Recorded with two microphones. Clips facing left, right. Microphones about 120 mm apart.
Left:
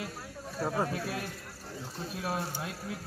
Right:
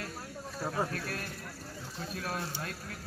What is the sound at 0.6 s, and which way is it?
Speech, 10° left (ahead or behind).